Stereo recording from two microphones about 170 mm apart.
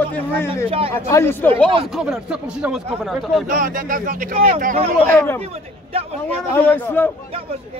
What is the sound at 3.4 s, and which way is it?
Speech, 50° right (ahead or behind).